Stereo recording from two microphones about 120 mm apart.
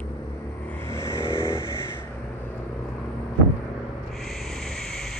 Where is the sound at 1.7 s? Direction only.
20° left (ahead or behind).